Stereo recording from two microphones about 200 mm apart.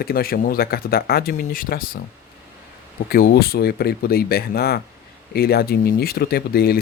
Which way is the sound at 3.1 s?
50° left (ahead or behind).